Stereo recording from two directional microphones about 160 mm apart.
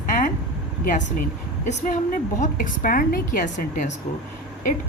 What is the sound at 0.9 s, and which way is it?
A woman's voice, 50° left (ahead or behind).